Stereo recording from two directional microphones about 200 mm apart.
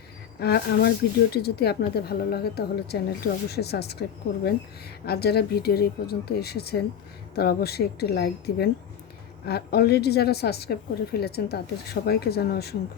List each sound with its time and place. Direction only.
0.3 s a woman's voice: 50° left (ahead or behind)
5.0 s a woman's voice: 55° left (ahead or behind)